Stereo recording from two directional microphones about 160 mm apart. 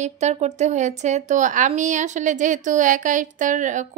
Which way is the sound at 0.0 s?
45° right (ahead or behind).